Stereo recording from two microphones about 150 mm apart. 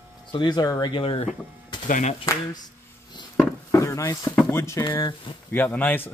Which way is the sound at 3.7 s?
20° left (ahead or behind).